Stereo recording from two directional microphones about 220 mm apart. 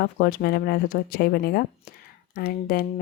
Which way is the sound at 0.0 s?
40° left (ahead or behind).